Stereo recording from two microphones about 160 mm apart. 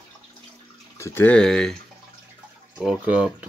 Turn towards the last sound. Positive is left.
turn(degrees=-5)  # may be behind; listen again after turning